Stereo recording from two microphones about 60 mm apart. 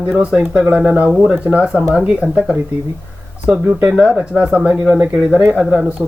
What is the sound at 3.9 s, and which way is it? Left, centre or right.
A woman's voice, centre.